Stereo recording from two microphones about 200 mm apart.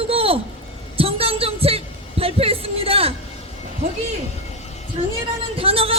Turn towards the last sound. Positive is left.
turn(degrees=-30)  # may be behind; listen again after turning